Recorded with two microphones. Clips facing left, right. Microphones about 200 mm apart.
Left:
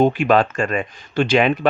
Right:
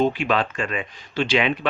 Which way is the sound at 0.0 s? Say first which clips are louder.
Left 6 dB; 50° left (ahead or behind).